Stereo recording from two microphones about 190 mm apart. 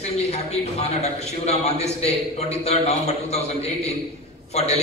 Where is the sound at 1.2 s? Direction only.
35° left (ahead or behind).